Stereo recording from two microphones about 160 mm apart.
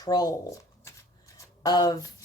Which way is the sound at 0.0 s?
25° left (ahead or behind).